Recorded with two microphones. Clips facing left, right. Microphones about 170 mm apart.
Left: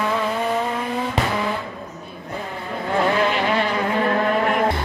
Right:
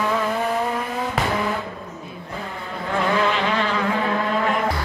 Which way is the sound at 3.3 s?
10° left (ahead or behind).